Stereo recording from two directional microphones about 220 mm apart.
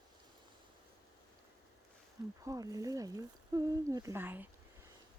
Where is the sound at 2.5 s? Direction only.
15° right (ahead or behind).